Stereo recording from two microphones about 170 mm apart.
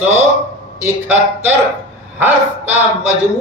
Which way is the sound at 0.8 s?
10° right (ahead or behind).